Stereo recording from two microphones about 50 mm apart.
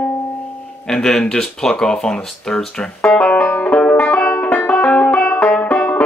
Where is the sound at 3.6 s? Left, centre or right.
Left.